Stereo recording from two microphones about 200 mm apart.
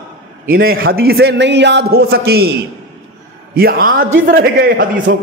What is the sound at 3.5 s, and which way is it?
A man's voice, 45° right (ahead or behind).